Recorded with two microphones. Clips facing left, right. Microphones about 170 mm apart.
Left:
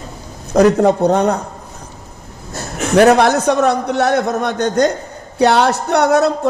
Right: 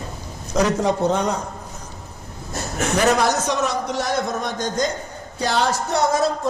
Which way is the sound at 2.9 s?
60° left (ahead or behind).